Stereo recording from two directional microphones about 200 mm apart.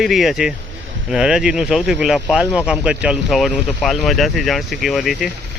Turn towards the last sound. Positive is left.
turn(degrees=0)  # may be behind; listen again after turning